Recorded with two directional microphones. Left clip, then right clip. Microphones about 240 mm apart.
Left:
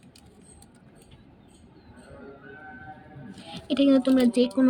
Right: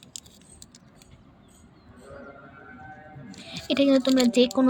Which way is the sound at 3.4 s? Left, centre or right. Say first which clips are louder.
Right 1 dB; right.